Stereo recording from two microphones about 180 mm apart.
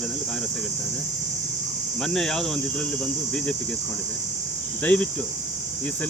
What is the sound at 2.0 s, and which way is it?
Cricket, 5° left (ahead or behind).